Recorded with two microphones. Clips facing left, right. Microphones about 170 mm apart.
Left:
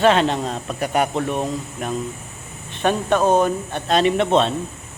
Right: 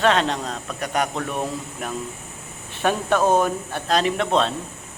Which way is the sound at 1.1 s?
25° left (ahead or behind).